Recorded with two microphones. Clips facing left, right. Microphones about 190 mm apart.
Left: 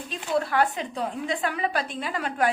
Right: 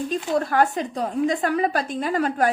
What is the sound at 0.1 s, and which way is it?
A woman's voice, 45° right (ahead or behind).